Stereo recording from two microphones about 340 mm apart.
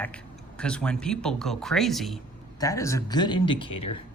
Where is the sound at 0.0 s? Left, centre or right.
Centre.